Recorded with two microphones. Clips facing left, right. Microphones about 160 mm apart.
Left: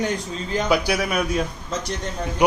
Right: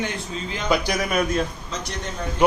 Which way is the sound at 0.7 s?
10° left (ahead or behind).